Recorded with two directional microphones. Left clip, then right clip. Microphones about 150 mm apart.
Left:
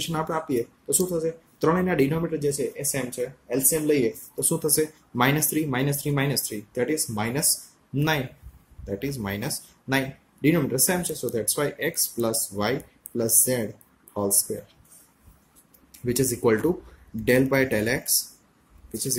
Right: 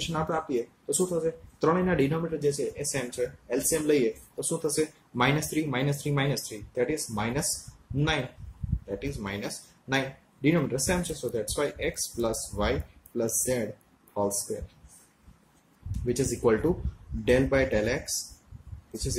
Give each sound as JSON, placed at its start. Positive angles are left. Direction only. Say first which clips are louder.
{"t": 0.0, "sound": "speech", "louder": "left 2 dB", "side_deg": 40}
{"t": 9.0, "sound": "speech", "louder": "left 6 dB", "side_deg": 40}
{"t": 16.1, "sound": "speech", "louder": "left 3 dB", "side_deg": 40}